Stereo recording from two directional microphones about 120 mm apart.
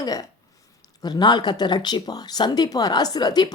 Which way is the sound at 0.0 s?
30° left (ahead or behind).